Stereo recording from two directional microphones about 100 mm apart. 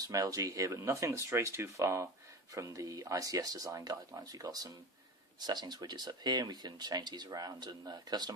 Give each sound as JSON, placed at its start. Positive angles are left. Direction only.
{"t": 0.0, "sound": "speech", "side_deg": -35}